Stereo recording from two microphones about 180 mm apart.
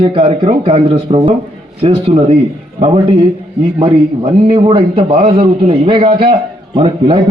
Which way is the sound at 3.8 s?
30° right (ahead or behind).